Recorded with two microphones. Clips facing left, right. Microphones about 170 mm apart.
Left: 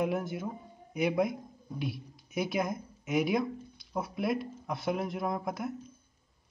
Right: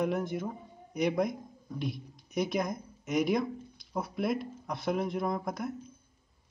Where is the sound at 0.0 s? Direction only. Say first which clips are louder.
Right 1 dB; 5° left (ahead or behind).